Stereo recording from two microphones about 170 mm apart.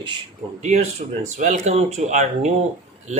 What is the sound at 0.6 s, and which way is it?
Speech, 40° right (ahead or behind).